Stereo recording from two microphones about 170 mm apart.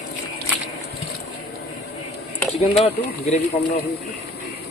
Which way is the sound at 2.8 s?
40° left (ahead or behind).